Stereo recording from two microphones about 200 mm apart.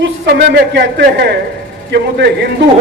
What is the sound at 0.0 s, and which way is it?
Speech, 55° right (ahead or behind).